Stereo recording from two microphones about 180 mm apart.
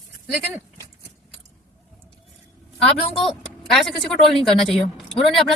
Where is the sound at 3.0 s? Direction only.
30° left (ahead or behind).